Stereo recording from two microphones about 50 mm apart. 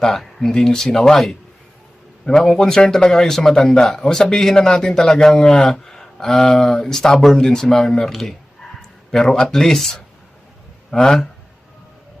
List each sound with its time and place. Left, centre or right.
0.0 s a man's voice: centre
8.8 s a sound: centre
9.4 s a man's voice: centre